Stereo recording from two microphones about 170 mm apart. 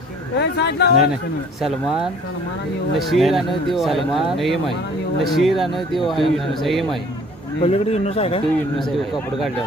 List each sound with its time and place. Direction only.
0.3 s speech: 80° left
3.1 s speech: centre (ahead or behind)
7.6 s speech: 35° left (ahead or behind)